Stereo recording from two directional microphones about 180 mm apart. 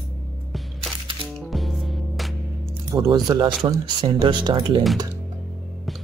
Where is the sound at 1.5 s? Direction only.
Centre (ahead or behind).